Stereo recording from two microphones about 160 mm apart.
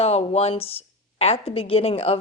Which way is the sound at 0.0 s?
40° left (ahead or behind).